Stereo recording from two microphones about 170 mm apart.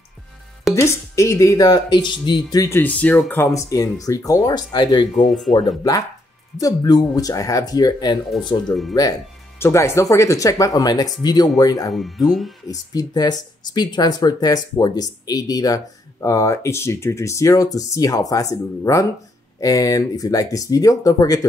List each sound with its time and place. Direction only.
0.7 s speech: 15° left (ahead or behind)
5.3 s speech: centre (ahead or behind)
6.6 s speech: 20° left (ahead or behind)
9.6 s speech: 15° left (ahead or behind)
11.9 s speech: centre (ahead or behind)
12.6 s speech: 25° left (ahead or behind)